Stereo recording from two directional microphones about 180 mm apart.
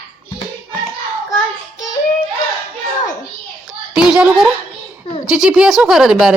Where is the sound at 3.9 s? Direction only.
5° right (ahead or behind).